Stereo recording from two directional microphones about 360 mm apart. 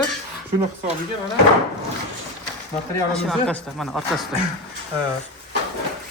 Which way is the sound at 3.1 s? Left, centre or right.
Centre.